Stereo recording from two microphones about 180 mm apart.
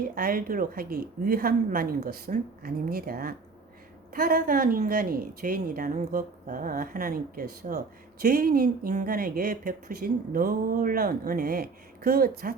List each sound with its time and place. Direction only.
0.0 s speech: 50° right (ahead or behind)